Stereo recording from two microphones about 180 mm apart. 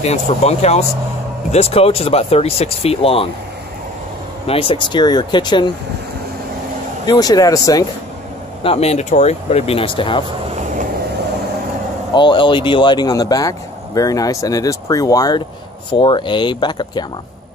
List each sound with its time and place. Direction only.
0.0 s speech: 35° left (ahead or behind)
4.5 s speech: 30° left (ahead or behind)
7.1 s speech: 20° left (ahead or behind)
8.6 s speech: 35° left (ahead or behind)
12.1 s speech: 25° left (ahead or behind)